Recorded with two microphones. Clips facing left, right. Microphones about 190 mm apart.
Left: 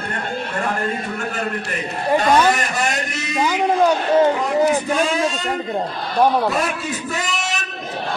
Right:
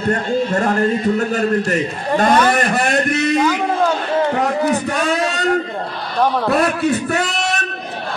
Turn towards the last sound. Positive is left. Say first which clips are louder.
# right 5 dB
turn(degrees=-65)  # may be behind; listen again after turning